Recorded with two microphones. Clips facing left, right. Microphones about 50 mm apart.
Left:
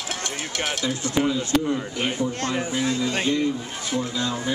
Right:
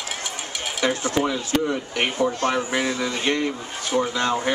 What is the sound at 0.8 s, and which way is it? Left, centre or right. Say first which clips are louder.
Speech: right 3 dB; right.